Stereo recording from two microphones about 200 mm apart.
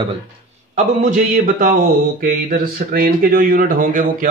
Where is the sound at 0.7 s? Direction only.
40° right (ahead or behind).